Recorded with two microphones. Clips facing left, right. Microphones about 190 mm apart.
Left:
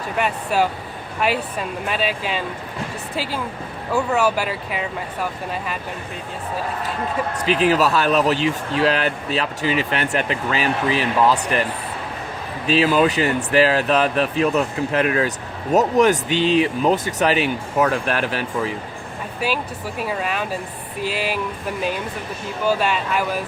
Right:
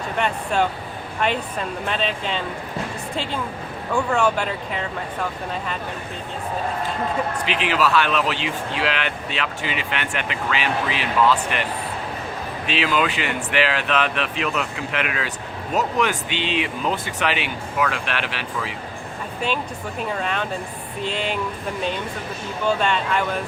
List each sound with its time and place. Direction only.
0.2 s speech: 5° left (ahead or behind)
3.9 s speech: 5° left (ahead or behind)
7.4 s speech: 40° left (ahead or behind)
12.6 s speech: 40° left (ahead or behind)
19.4 s speech: 5° left (ahead or behind)
22.6 s speech: 5° left (ahead or behind)